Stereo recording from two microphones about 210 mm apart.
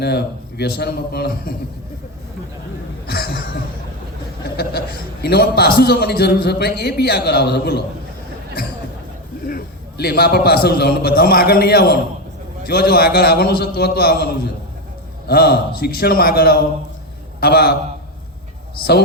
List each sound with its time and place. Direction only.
0.0 s a man's voice: 50° left (ahead or behind)
3.1 s a sound: 50° left (ahead or behind)
5.2 s a man's voice: 50° left (ahead or behind)
9.5 s a man's voice: 45° left (ahead or behind)
15.3 s a man's voice: 45° left (ahead or behind)